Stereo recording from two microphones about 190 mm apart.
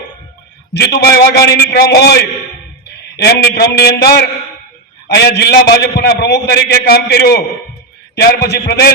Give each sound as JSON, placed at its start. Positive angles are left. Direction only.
{"t": 0.7, "sound": "a man's voice", "side_deg": 60}